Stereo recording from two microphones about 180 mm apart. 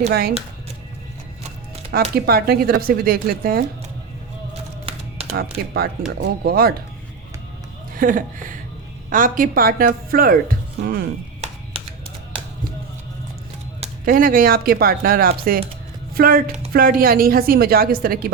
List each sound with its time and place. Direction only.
0.1 s a woman's voice: 60° right (ahead or behind)
1.9 s a woman's voice: 60° right (ahead or behind)
5.2 s music: 35° right (ahead or behind)
5.6 s a woman's voice: 55° right (ahead or behind)
7.9 s speech: 50° right (ahead or behind)
11.7 s tap: 30° right (ahead or behind)
14.0 s a woman's voice: 50° right (ahead or behind)